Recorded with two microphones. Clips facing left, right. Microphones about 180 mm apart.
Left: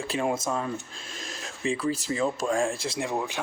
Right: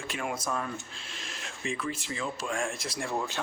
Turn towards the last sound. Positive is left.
turn(degrees=15)  # may be behind; listen again after turning